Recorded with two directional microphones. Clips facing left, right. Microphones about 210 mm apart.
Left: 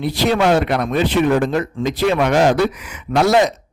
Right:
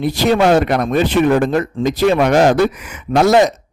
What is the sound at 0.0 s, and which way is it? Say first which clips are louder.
A man's voice: right 3 dB; 45° right (ahead or behind).